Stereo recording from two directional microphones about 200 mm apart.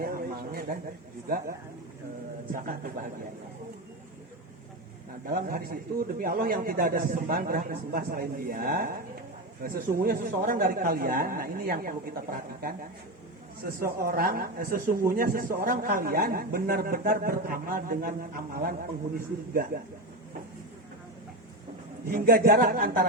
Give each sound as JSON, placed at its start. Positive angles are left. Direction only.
{"t": 0.0, "sound": "a sound", "side_deg": -50}
{"t": 2.5, "sound": "speech", "side_deg": -45}
{"t": 5.2, "sound": "speech", "side_deg": -45}
{"t": 22.0, "sound": "speech", "side_deg": -45}